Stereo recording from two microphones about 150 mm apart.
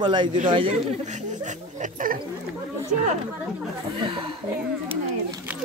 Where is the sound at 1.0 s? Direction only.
50° right (ahead or behind).